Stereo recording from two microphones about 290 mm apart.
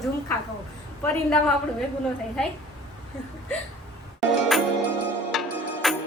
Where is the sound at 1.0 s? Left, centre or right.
Centre.